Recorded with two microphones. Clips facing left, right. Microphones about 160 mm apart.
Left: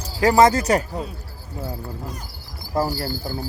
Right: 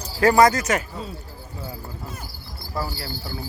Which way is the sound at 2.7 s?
45° left (ahead or behind).